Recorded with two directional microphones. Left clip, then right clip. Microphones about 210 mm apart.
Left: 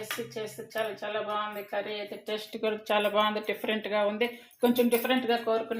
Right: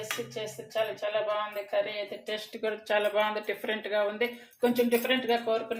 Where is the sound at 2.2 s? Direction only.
15° left (ahead or behind).